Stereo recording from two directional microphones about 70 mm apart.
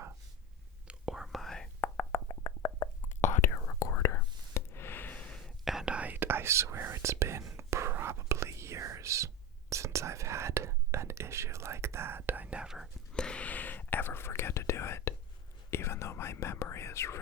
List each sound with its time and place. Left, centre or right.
0.9 s whispering: centre
1.8 s whispering: left
2.6 s a sound: left
4.0 s whispering: left; by 5.4 s centre
5.4 s whispering: centre
5.8 s whispering: centre
6.1 s whispering: right; by 12.7 s centre
13.1 s whispering: centre; by 17.2 s left